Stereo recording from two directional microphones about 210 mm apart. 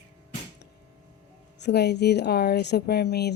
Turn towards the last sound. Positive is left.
turn(degrees=50)  # may be behind; listen again after turning